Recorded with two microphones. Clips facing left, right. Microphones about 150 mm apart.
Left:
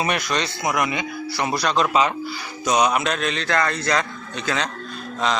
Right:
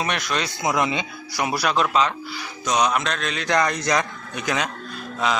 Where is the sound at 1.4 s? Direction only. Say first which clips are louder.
Even; 10° right (ahead or behind).